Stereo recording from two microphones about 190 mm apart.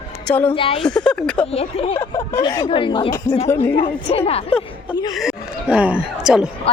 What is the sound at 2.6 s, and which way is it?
Speech, 25° left (ahead or behind).